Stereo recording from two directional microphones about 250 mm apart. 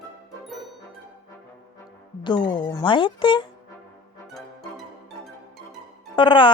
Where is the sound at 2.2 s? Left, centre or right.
Centre.